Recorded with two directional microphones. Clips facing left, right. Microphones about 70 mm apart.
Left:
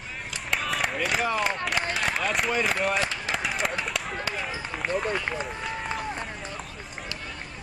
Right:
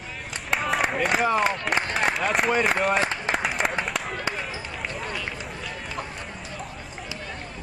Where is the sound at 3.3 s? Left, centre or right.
Right.